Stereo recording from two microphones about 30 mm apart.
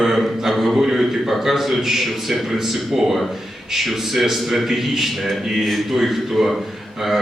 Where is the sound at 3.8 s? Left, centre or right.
Centre.